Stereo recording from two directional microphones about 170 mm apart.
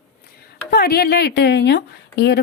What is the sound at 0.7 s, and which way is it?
Speech, 65° left (ahead or behind).